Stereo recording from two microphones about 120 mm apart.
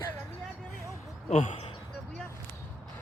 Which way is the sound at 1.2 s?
80° left.